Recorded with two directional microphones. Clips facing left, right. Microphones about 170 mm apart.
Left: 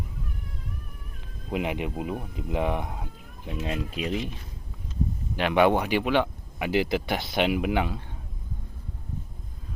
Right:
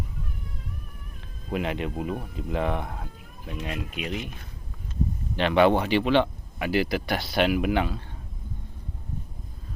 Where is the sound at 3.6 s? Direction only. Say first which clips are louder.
Left 3 dB; 30° left (ahead or behind).